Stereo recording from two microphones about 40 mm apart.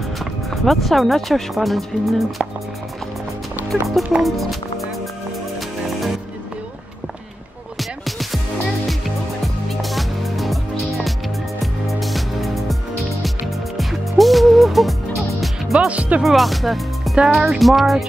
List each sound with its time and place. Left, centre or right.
0.2 s speech: centre
4.2 s speech: centre
8.0 s music: centre
9.7 s music: centre
11.6 s music: centre
13.7 s music: centre
15.9 s music: right
16.2 s speech: centre